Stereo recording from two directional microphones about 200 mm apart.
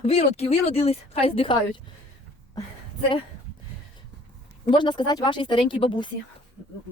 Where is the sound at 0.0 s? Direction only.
30° left (ahead or behind).